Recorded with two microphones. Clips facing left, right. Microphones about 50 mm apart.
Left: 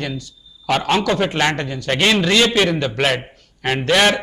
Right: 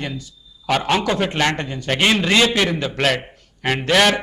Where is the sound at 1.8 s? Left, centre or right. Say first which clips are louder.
Left 1 dB; centre.